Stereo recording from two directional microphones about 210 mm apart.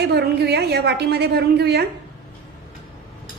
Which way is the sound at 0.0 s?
50° right (ahead or behind).